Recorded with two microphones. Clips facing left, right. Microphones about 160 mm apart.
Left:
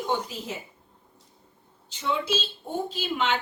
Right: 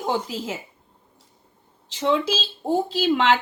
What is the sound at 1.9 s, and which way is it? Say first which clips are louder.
A woman's voice: right 6 dB; 90° right.